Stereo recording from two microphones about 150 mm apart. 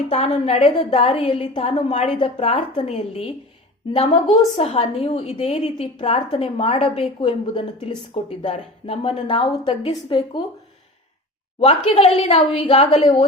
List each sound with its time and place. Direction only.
0.1 s a woman's voice: 45° left (ahead or behind)
8.4 s a woman's voice: 45° left (ahead or behind)
9.2 s a woman's voice: 35° left (ahead or behind)
11.6 s a woman's voice: 45° left (ahead or behind)